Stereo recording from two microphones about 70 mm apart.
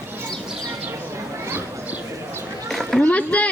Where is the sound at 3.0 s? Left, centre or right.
Centre.